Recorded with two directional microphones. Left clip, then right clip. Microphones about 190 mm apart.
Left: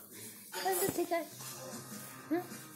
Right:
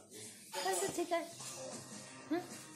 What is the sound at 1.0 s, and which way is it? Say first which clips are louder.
Speech: left 2 dB; 35° right (ahead or behind).